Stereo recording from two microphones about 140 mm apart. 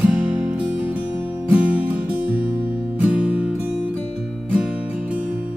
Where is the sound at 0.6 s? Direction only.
10° right (ahead or behind).